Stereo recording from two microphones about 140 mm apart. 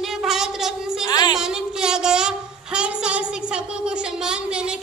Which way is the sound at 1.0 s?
30° left (ahead or behind).